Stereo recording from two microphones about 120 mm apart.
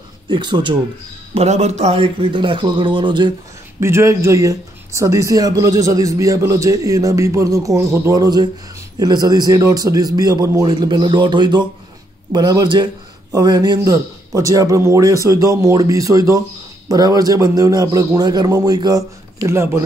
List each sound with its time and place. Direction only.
0.3 s a man's voice: 40° right (ahead or behind)
1.3 s a man's voice: 60° right (ahead or behind); by 3.3 s 40° right (ahead or behind)
3.8 s a man's voice: 20° right (ahead or behind)